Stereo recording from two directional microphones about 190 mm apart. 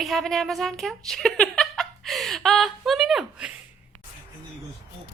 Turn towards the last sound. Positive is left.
turn(degrees=-5)  # may be behind; listen again after turning